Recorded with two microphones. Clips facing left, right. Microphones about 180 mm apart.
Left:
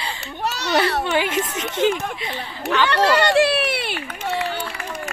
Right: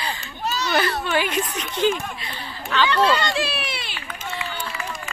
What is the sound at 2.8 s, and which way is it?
Run, 70° left (ahead or behind).